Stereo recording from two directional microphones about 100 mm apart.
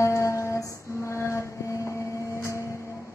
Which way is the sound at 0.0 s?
30° left (ahead or behind).